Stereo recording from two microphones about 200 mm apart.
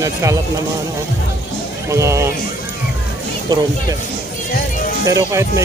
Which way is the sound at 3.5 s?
20° right (ahead or behind).